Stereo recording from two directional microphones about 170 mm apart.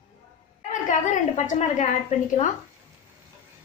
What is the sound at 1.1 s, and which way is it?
Speech, 45° left (ahead or behind).